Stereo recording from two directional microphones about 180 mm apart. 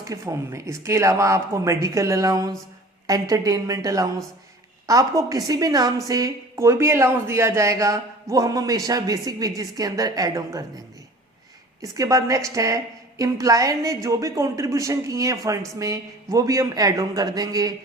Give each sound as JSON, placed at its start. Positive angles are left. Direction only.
{"t": 0.0, "sound": "a woman's voice", "side_deg": -15}
{"t": 11.8, "sound": "a woman's voice", "side_deg": -20}